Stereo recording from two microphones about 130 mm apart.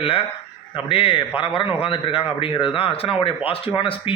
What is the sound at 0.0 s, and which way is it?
A man's voice, 45° left (ahead or behind).